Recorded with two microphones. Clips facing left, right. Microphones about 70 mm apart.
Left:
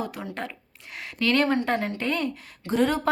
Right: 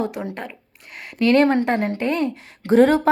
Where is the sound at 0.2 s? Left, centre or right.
Right.